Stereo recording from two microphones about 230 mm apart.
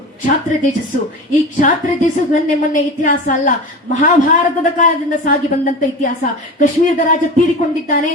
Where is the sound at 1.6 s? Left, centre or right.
Left.